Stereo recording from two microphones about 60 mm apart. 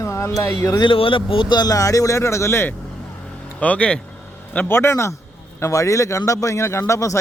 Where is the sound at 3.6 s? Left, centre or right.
Left.